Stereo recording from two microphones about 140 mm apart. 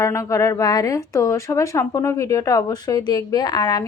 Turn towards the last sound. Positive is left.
turn(degrees=25)  # may be behind; listen again after turning